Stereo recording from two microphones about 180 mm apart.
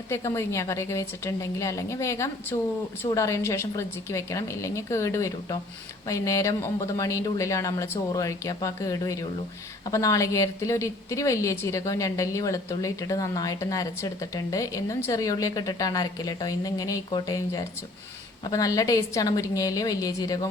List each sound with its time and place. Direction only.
0.1 s a woman's voice: 15° left (ahead or behind)